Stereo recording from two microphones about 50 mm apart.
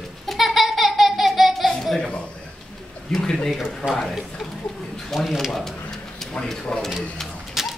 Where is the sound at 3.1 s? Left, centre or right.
Centre.